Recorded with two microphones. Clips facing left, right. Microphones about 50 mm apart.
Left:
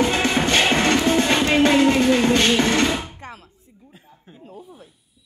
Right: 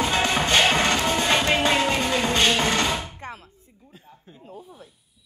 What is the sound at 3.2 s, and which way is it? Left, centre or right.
Music, right.